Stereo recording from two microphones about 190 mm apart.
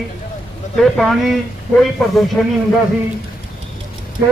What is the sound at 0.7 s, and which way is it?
Speech, centre (ahead or behind).